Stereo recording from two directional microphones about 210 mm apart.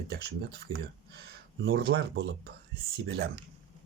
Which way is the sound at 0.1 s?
50° right (ahead or behind).